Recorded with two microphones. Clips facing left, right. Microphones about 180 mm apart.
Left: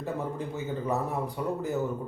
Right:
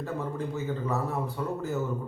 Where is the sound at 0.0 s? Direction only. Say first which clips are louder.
Even; 15° left (ahead or behind).